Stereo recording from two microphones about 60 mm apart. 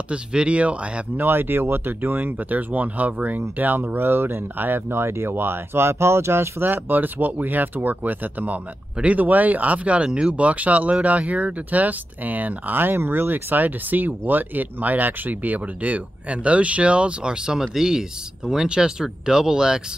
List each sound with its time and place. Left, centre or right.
0.1 s speech: centre
1.1 s speech: right; by 19.8 s centre